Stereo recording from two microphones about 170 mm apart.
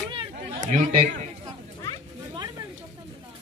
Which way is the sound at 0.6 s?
45° right (ahead or behind).